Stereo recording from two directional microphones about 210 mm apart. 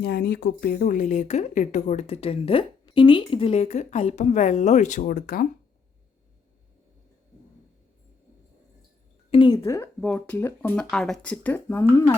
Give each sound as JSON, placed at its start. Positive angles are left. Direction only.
{"t": 0.0, "sound": "a woman's voice", "side_deg": 50}
{"t": 9.3, "sound": "a woman's voice", "side_deg": 25}
{"t": 9.6, "sound": "speech", "side_deg": 10}